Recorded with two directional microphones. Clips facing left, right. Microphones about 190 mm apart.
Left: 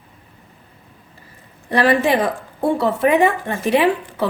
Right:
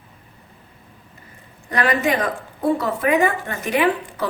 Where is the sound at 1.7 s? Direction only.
30° left (ahead or behind).